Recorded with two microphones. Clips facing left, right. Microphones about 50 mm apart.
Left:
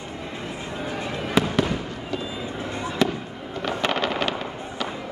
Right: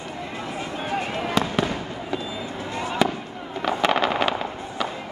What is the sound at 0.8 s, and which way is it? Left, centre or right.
Fireworks, right.